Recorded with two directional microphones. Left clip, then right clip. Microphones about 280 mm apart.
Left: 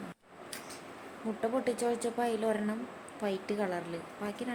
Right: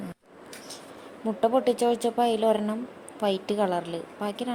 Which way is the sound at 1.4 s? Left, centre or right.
Centre.